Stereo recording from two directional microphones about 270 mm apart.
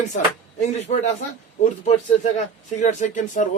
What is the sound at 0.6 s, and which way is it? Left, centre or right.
Speech, left.